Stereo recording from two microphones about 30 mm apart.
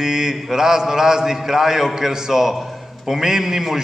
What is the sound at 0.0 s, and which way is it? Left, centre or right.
A man's voice, centre.